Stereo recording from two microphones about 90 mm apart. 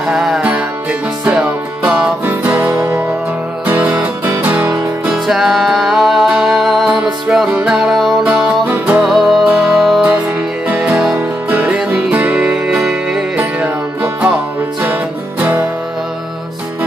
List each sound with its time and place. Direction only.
0.0 s music: 5° right (ahead or behind)
4.3 s music: 25° right (ahead or behind)
5.0 s music: 5° right (ahead or behind)
7.0 s music: 10° right (ahead or behind)
9.0 s music: centre (ahead or behind)
10.7 s music: 10° right (ahead or behind)
13.4 s music: 20° right (ahead or behind)